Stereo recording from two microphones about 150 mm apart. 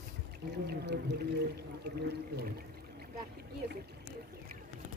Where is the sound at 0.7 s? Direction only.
90° right.